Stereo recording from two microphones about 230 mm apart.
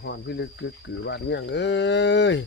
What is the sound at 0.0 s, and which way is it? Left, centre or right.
Speech, left.